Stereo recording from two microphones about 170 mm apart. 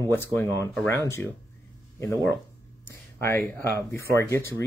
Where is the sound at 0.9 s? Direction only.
15° left (ahead or behind).